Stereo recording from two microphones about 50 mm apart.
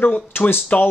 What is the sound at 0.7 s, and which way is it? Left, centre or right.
Speech, left.